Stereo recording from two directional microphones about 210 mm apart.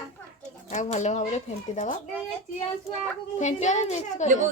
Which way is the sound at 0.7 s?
35° left (ahead or behind).